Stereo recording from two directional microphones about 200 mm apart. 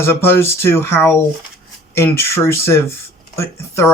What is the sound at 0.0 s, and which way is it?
Speech, 10° left (ahead or behind).